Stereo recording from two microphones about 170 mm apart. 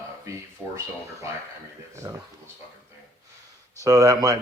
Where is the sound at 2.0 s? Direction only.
25° right (ahead or behind).